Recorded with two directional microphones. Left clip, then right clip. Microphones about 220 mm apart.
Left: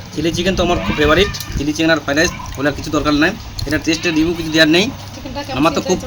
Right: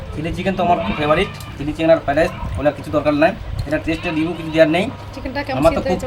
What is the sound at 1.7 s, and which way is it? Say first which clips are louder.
Speech: right 1 dB; 10° right (ahead or behind).